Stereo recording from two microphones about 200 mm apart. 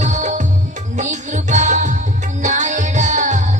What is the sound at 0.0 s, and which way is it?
Music, 35° right (ahead or behind).